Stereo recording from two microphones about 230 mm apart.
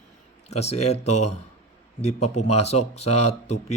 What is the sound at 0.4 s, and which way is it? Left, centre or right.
Speech, left.